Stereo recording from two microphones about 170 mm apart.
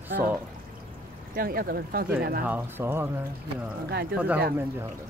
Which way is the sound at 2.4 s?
10° right (ahead or behind).